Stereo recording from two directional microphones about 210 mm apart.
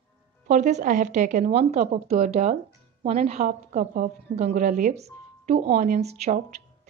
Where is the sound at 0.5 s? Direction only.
35° right (ahead or behind).